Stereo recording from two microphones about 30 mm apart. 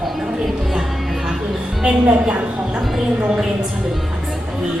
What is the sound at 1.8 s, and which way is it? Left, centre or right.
Speech, right.